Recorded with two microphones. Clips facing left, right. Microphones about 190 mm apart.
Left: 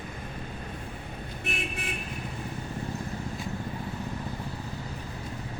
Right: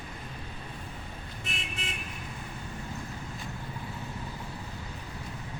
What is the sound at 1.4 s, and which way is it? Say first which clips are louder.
Vehicle: left 6 dB; 60° left (ahead or behind).